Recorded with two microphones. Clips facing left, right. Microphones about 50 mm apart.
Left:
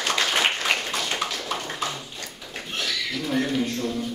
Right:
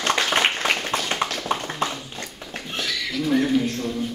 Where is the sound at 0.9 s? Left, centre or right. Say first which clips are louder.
Right 3 dB; right.